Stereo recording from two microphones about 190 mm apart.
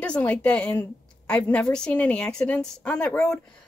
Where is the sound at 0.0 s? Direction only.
5° left (ahead or behind).